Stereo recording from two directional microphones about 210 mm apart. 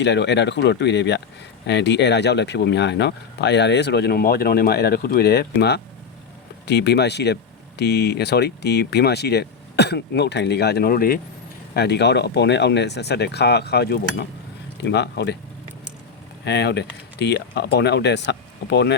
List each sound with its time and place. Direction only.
0.0 s speech: 55° left (ahead or behind)
16.4 s speech: 55° left (ahead or behind)